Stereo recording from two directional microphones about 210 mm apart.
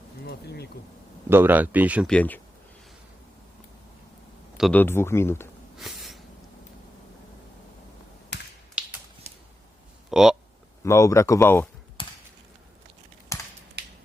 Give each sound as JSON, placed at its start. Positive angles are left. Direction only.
{"t": 0.3, "sound": "bee", "side_deg": 50}
{"t": 1.3, "sound": "speech", "side_deg": -10}
{"t": 2.0, "sound": "speech", "side_deg": 5}
{"t": 4.5, "sound": "speech", "side_deg": 5}
{"t": 5.7, "sound": "a sound", "side_deg": 0}
{"t": 8.3, "sound": "tap", "side_deg": 55}
{"t": 8.8, "sound": "finger snapping", "side_deg": -5}
{"t": 9.2, "sound": "whip", "side_deg": -30}
{"t": 10.1, "sound": "speech", "side_deg": 0}
{"t": 10.8, "sound": "speech", "side_deg": 15}
{"t": 12.0, "sound": "a sound", "side_deg": 25}
{"t": 13.3, "sound": "a sound", "side_deg": 15}
{"t": 13.8, "sound": "a sound", "side_deg": -50}